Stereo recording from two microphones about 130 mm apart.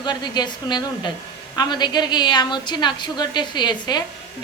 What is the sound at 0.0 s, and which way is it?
Speech, 35° left (ahead or behind).